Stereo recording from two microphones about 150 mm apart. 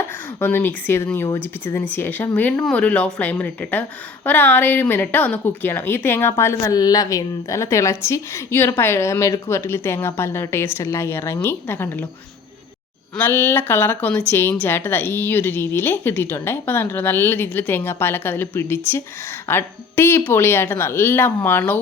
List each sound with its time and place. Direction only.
0.3 s speech: 15° left (ahead or behind)
13.1 s speech: 15° left (ahead or behind)